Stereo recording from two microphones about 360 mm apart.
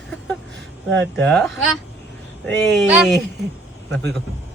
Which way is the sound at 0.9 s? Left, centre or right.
Right.